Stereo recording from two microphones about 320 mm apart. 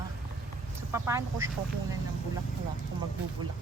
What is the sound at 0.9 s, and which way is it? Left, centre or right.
Speech, centre.